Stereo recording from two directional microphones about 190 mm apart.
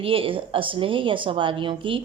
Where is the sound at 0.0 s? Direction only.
30° right (ahead or behind).